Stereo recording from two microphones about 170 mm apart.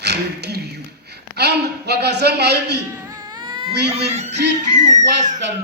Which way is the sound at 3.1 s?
20° right (ahead or behind).